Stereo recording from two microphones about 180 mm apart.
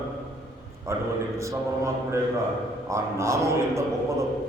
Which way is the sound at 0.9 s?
15° right (ahead or behind).